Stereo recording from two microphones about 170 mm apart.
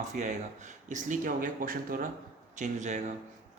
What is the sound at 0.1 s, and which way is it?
Speech, 45° right (ahead or behind).